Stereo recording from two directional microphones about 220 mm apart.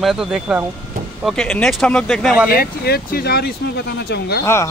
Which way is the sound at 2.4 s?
45° left (ahead or behind).